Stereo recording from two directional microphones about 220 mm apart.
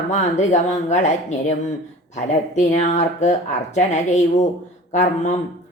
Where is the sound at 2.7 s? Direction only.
30° left (ahead or behind).